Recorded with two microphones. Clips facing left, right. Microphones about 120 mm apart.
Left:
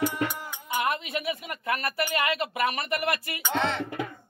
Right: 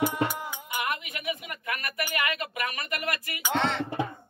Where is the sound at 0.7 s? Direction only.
30° left (ahead or behind).